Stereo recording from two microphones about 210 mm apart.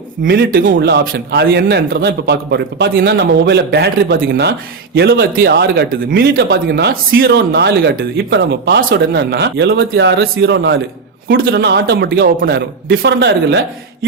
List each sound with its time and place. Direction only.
0.3 s speech: 50° right (ahead or behind)
11.3 s speech: 45° right (ahead or behind)
13.0 s speech: 60° right (ahead or behind)